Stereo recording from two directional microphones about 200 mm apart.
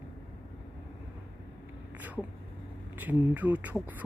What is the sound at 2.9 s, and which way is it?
Speech, 10° right (ahead or behind).